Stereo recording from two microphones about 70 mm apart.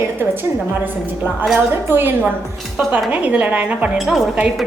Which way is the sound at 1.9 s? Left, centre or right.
Right.